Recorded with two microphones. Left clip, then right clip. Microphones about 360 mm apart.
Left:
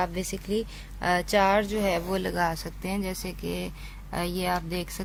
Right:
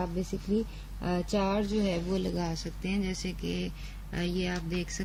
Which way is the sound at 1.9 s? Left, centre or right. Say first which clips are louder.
Left 5 dB; centre.